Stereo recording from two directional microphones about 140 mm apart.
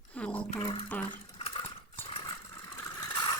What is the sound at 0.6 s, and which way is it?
Speech, 40° left (ahead or behind).